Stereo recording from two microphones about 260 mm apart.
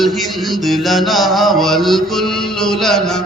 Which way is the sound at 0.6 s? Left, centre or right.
Centre.